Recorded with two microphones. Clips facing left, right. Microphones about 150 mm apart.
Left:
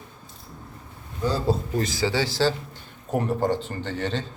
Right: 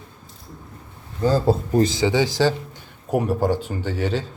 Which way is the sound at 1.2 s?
45° right (ahead or behind).